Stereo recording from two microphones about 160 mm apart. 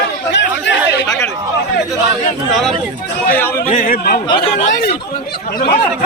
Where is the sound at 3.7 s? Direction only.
60° left (ahead or behind).